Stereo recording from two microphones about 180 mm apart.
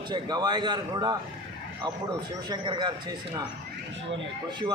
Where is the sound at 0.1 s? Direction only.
25° right (ahead or behind).